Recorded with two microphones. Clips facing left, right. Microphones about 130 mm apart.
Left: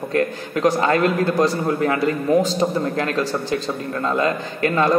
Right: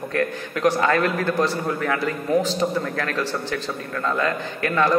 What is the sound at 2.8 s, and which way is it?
A man's voice, 25° left (ahead or behind).